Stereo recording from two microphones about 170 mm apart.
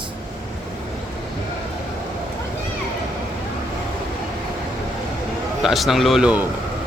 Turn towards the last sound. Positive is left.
turn(degrees=-5)  # may be behind; listen again after turning